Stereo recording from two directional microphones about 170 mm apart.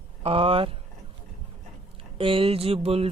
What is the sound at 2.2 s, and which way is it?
Speech, 30° right (ahead or behind).